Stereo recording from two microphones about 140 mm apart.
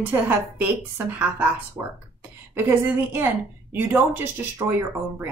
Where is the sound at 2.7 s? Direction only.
15° right (ahead or behind).